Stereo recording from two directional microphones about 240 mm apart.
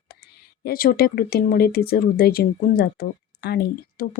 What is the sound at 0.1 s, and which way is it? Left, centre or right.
Speech, left.